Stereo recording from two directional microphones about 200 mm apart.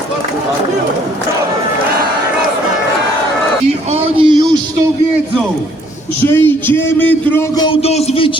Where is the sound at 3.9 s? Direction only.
30° right (ahead or behind).